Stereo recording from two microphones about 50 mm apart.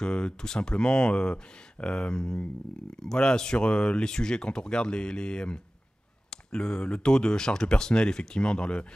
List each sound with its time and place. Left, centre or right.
0.0 s speech: centre